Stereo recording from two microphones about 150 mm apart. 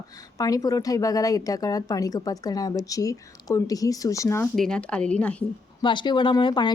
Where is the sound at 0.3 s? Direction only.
25° left (ahead or behind).